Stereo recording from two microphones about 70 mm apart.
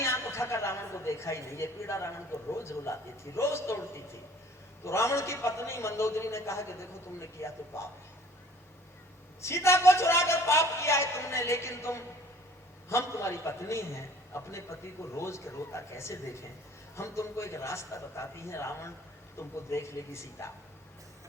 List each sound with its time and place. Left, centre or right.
0.0 s a woman's voice: left
9.4 s a man's voice: left